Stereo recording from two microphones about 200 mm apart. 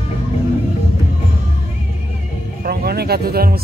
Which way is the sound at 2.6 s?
50° right (ahead or behind).